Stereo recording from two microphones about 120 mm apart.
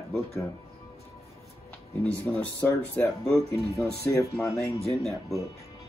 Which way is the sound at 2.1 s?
10° left (ahead or behind).